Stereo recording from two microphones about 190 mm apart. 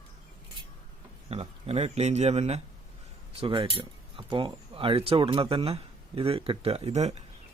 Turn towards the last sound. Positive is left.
turn(degrees=-35)  # may be behind; listen again after turning